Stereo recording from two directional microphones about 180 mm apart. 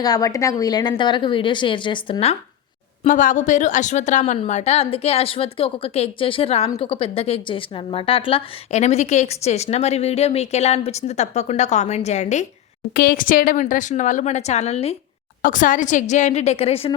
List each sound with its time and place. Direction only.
0.0 s a woman's voice: 20° left (ahead or behind)
3.0 s a woman's voice: 45° left (ahead or behind)
12.9 s speech: 55° left (ahead or behind); by 14.9 s 35° left (ahead or behind)
15.4 s a woman's voice: 50° left (ahead or behind); by 16.9 s 35° left (ahead or behind)